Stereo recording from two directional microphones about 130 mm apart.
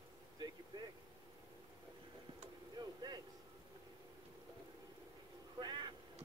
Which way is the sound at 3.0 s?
35° right (ahead or behind).